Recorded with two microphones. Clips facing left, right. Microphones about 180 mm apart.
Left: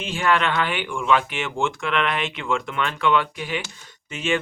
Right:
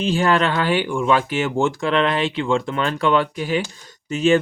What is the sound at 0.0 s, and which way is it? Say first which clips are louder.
Speech: right 4 dB; 35° right (ahead or behind).